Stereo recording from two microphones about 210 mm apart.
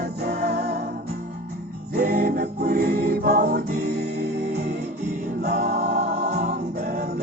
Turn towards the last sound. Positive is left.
turn(degrees=-50)  # may be behind; listen again after turning